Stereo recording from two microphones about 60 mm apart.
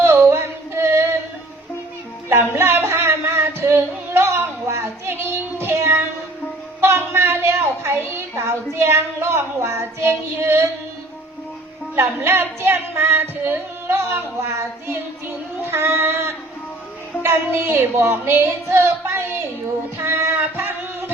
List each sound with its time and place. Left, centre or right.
0.0 s singing: right
2.3 s singing: right
6.8 s a woman's voice: right
11.9 s singing: right
17.2 s female singing: right
19.6 s child singing: right